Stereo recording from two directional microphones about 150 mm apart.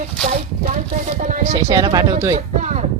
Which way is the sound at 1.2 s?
55° right (ahead or behind).